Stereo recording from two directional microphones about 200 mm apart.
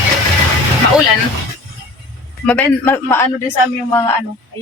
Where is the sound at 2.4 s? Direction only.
5° left (ahead or behind).